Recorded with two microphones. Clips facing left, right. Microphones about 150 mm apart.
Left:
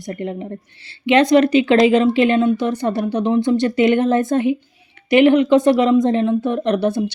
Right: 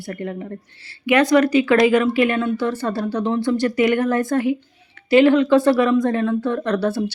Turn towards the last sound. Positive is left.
turn(degrees=20)  # may be behind; listen again after turning